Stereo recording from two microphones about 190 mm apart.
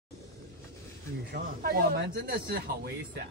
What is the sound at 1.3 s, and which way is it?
Speech, 55° right (ahead or behind).